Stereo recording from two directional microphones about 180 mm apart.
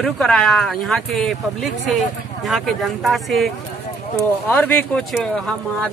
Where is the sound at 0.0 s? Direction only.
5° left (ahead or behind).